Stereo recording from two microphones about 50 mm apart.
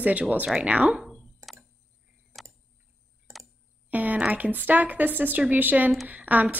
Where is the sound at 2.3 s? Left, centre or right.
Centre.